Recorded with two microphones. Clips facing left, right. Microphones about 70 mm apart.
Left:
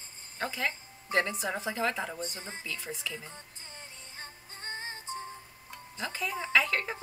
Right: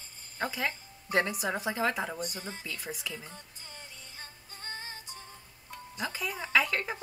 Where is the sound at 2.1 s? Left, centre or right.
Left.